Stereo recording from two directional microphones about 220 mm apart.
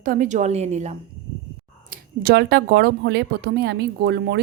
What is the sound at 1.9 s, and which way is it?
A woman's voice, 45° right (ahead or behind).